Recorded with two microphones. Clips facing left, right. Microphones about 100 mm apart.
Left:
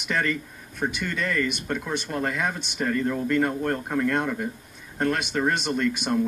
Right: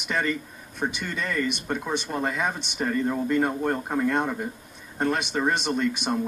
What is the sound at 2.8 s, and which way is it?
Speech, 20° right (ahead or behind).